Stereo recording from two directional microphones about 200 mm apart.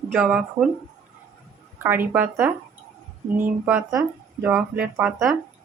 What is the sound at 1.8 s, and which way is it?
Speech, 10° right (ahead or behind).